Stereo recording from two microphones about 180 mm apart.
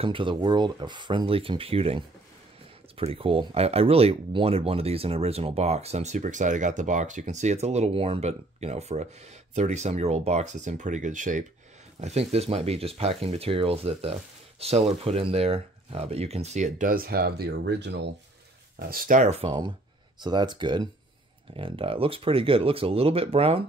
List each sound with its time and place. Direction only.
0.0 s speech: 30° right (ahead or behind); by 18.1 s 70° right (ahead or behind)
18.8 s speech: 55° right (ahead or behind); by 19.5 s 40° right (ahead or behind)
20.2 s speech: 25° right (ahead or behind)